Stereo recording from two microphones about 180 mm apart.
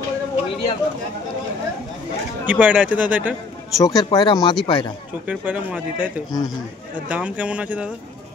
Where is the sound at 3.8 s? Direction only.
20° left (ahead or behind).